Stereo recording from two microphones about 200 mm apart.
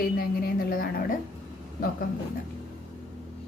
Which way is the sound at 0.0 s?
50° left (ahead or behind).